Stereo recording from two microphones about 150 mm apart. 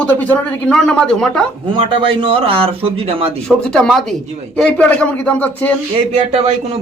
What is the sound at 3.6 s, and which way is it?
Speech, 5° left (ahead or behind).